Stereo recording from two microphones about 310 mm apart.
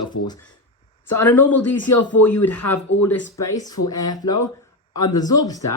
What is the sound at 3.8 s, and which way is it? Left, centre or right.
Speech, centre.